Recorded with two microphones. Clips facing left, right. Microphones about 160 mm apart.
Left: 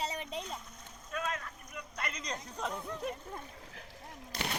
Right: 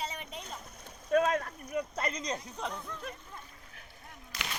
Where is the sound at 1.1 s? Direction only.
60° right (ahead or behind).